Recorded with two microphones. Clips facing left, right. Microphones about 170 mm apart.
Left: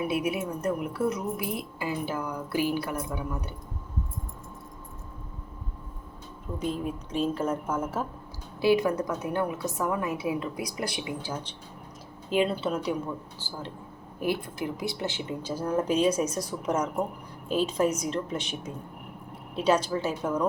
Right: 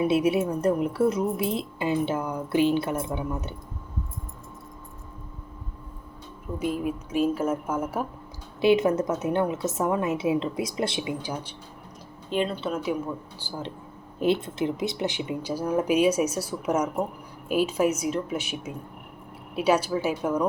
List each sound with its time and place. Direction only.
0.0 s a woman's voice: 25° right (ahead or behind)
6.6 s speech: 10° right (ahead or behind)
8.6 s a woman's voice: 20° right (ahead or behind)
12.3 s a woman's voice: 5° left (ahead or behind)
13.4 s speech: 15° right (ahead or behind)